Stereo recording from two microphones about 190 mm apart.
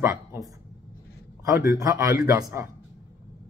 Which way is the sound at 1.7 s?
20° right (ahead or behind).